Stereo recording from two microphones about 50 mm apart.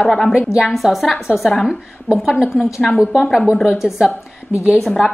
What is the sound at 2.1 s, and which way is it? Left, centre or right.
Speech, centre.